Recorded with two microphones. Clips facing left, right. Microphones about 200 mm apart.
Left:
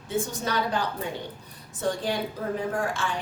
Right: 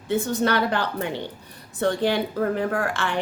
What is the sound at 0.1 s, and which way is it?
A woman's voice, 70° right (ahead or behind).